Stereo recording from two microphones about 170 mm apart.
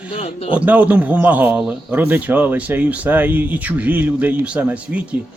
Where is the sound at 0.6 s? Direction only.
10° right (ahead or behind).